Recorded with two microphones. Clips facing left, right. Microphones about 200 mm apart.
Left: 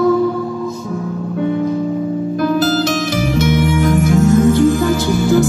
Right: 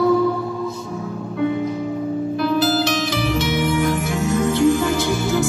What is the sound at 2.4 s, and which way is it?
Music, 45° left (ahead or behind).